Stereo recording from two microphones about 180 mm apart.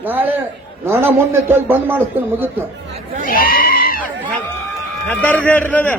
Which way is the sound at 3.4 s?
55° left (ahead or behind).